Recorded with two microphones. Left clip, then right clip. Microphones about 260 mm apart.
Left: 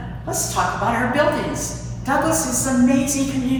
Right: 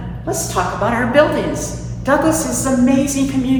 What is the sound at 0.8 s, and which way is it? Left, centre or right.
Speech, centre.